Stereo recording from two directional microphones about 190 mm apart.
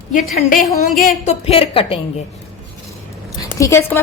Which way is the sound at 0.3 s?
45° left (ahead or behind).